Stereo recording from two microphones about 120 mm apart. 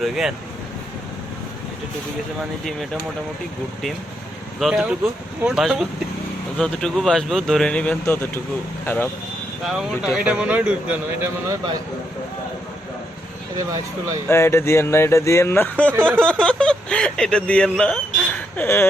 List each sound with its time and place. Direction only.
0.0 s speech: 5° right (ahead or behind)
4.6 s speech: centre (ahead or behind); by 8.3 s 15° left (ahead or behind)
9.6 s speech: 5° right (ahead or behind)
13.6 s speech: 30° right (ahead or behind)
14.3 s speech: 20° left (ahead or behind)